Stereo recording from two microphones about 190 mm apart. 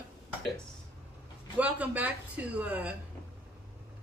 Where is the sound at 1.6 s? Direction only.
5° right (ahead or behind).